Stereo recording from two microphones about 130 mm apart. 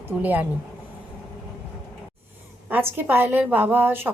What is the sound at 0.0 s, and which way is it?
Speech, 15° right (ahead or behind).